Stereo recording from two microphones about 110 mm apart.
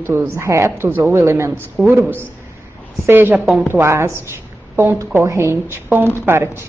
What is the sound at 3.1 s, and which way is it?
Speech, 20° right (ahead or behind).